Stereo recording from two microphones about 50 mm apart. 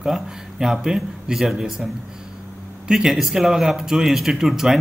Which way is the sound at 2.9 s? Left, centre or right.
Centre.